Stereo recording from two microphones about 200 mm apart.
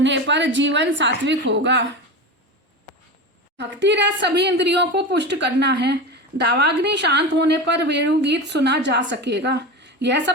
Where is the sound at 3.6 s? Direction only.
60° right (ahead or behind).